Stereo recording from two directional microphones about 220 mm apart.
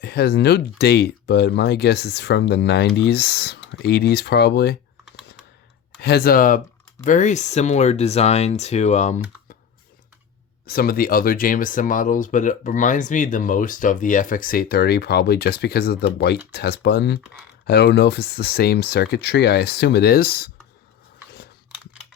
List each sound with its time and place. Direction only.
0.0 s speech: 45° left (ahead or behind)
6.0 s speech: 45° left (ahead or behind)
10.7 s speech: 45° left (ahead or behind)